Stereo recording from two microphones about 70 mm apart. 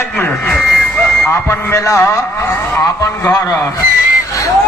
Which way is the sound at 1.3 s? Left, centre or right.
Left.